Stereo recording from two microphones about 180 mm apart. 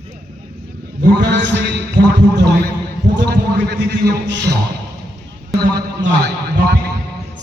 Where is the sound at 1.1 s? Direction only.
80° right.